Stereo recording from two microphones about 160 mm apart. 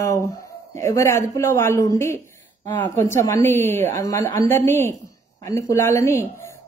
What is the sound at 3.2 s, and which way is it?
A woman's voice, 15° left (ahead or behind).